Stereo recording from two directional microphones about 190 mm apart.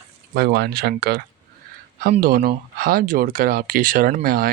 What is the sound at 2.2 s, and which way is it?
Speech, 50° right (ahead or behind).